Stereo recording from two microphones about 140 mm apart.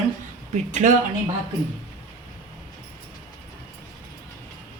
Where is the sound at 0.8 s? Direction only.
65° right (ahead or behind).